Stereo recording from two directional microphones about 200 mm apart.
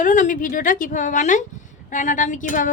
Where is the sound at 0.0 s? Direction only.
40° left (ahead or behind).